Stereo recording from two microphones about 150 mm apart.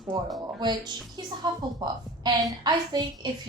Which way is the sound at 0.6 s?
30° right (ahead or behind).